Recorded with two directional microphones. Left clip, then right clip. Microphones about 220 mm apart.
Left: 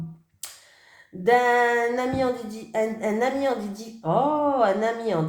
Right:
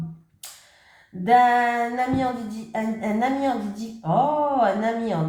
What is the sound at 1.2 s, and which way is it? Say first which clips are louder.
Speech: right 2 dB; 45° left (ahead or behind).